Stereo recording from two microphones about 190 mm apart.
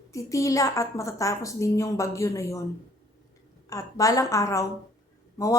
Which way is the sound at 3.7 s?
15° left (ahead or behind).